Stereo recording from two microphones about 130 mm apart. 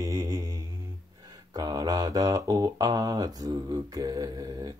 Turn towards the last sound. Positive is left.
turn(degrees=-30)  # may be behind; listen again after turning